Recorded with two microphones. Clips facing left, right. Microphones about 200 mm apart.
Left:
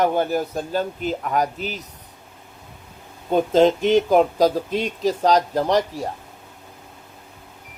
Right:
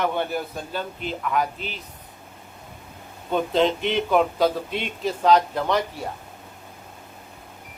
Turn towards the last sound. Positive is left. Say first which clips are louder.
# left 4 dB
turn(degrees=40)  # may be behind; listen again after turning